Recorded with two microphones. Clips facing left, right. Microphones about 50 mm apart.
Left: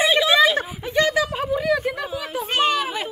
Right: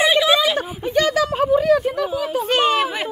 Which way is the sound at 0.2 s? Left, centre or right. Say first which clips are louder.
Even; centre.